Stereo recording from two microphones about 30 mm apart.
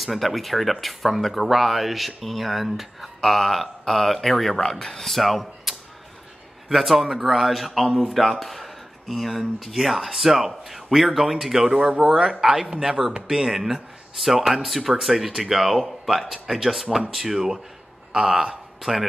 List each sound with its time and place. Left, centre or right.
0.0 s speech: centre
5.1 s speech: centre
18.1 s speech: centre
18.8 s a man's voice: centre